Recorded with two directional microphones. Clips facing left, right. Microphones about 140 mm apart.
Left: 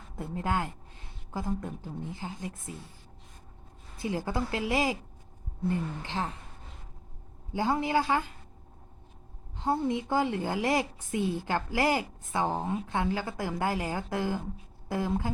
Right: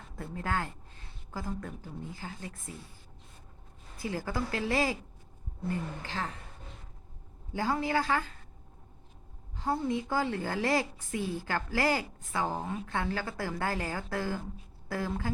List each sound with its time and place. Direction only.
0.2 s a woman's voice: 20° left (ahead or behind)
3.9 s a woman's voice: 20° left (ahead or behind)
7.5 s a woman's voice: 20° left (ahead or behind)
9.6 s a woman's voice: 20° left (ahead or behind)